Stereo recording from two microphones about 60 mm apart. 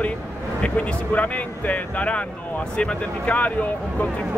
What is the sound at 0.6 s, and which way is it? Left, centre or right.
Speech, left.